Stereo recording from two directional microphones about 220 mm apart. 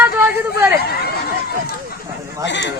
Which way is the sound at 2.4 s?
55° left (ahead or behind).